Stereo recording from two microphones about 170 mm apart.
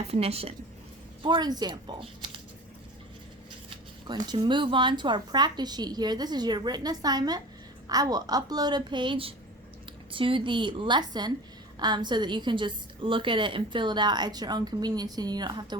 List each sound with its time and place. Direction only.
0.1 s a woman's voice: 35° right (ahead or behind)
1.2 s a woman's voice: 25° right (ahead or behind)
4.0 s a woman's voice: 25° right (ahead or behind)